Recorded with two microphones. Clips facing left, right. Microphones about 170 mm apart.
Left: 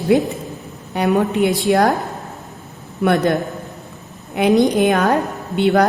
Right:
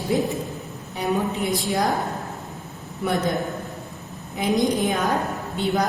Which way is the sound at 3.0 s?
70° left (ahead or behind).